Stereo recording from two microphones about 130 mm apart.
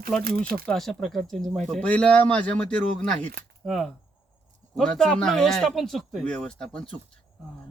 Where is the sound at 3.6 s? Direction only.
Centre (ahead or behind).